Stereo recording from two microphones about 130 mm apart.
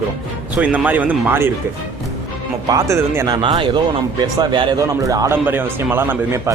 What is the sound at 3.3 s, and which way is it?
A man's voice, 35° right (ahead or behind).